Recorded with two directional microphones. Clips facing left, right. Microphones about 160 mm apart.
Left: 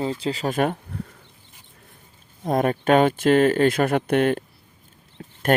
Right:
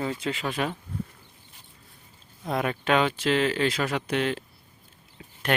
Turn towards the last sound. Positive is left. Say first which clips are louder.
# left 7 dB
turn(degrees=50)  # may be behind; listen again after turning